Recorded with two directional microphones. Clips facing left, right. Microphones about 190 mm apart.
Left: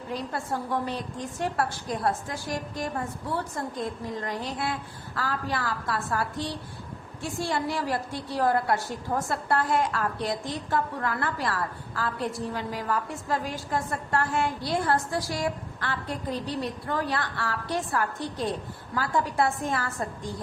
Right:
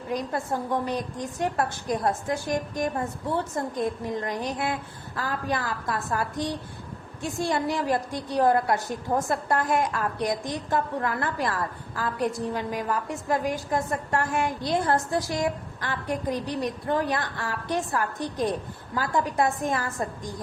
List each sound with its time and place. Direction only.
0.1 s a woman's voice: 15° right (ahead or behind)